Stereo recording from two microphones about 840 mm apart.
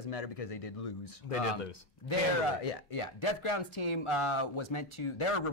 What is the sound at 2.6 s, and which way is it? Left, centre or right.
Speech, left.